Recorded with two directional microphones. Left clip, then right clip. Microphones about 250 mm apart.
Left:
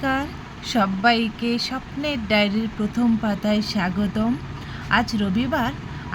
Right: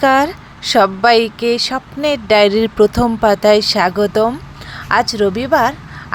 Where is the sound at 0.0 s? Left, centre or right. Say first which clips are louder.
Right 13 dB; right.